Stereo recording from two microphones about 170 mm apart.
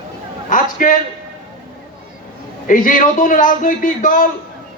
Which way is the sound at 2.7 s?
50° left (ahead or behind).